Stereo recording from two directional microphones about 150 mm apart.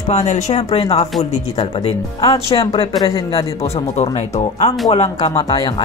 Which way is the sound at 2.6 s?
25° left (ahead or behind).